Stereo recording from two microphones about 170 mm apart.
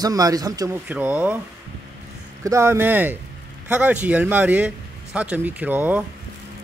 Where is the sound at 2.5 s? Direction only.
15° right (ahead or behind).